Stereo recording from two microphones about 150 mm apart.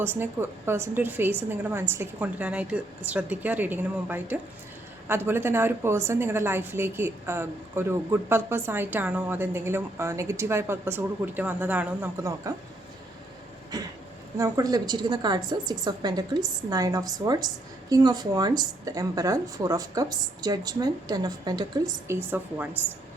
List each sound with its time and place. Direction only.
0.0 s a woman's voice: 15° right (ahead or behind)
12.2 s a woman's voice: 20° right (ahead or behind)
13.7 s a woman's voice: 25° right (ahead or behind)